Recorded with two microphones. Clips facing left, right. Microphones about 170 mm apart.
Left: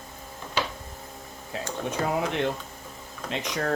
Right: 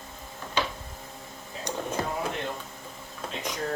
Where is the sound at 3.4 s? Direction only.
85° left.